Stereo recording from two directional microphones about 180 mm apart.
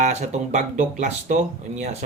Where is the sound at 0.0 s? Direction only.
40° right (ahead or behind).